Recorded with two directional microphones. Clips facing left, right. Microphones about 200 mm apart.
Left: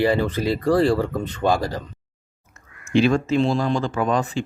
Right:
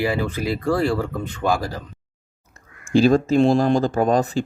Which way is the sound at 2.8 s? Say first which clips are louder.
Right 3 dB; 35° right (ahead or behind).